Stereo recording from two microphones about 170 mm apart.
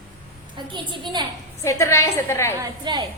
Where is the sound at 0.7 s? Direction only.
30° right (ahead or behind).